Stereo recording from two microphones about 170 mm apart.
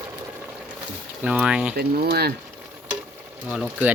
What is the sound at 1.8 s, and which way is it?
Speech, 65° right (ahead or behind).